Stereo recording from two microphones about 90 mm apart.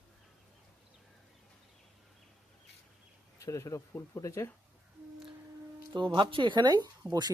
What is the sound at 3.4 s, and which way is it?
Speech, 35° left (ahead or behind).